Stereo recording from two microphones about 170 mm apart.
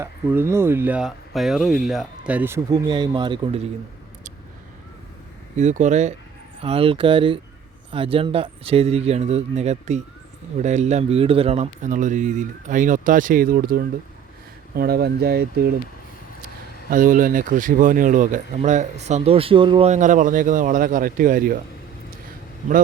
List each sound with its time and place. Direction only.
0.0 s speech: 15° right (ahead or behind)
2.9 s speech: 25° right (ahead or behind)
5.5 s speech: 45° right (ahead or behind); by 15.7 s 70° right (ahead or behind)
16.9 s speech: 50° right (ahead or behind); by 19.9 s 30° right (ahead or behind)
19.9 s speech: 45° right (ahead or behind)